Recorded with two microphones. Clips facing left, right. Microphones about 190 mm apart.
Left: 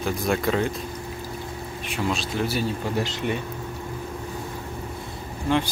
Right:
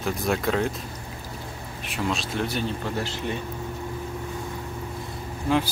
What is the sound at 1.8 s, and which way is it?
Speech, centre (ahead or behind).